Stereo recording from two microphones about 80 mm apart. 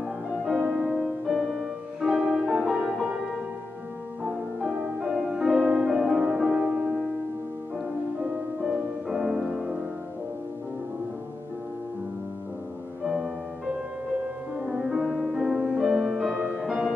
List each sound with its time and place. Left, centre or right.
0.6 s music: right
0.8 s music: centre
4.2 s music: centre
5.6 s music: centre
5.9 s music: centre
6.6 s music: centre
8.6 s music: centre
13.0 s music: centre
14.6 s music: centre